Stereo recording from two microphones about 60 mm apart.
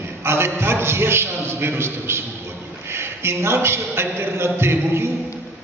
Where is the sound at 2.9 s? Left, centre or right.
Right.